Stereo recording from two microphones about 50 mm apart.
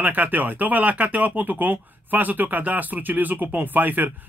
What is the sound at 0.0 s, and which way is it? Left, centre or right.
Speech, right.